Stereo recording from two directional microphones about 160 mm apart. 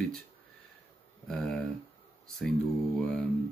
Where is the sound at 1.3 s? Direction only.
Centre (ahead or behind).